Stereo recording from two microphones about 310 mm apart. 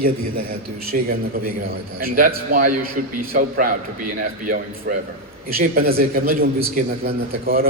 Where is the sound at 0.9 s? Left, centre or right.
Right.